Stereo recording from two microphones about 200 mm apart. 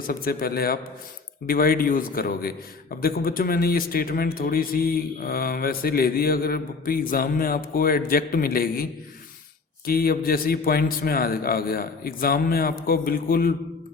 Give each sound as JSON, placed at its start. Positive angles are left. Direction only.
{"t": 0.1, "sound": "a man's voice", "side_deg": 45}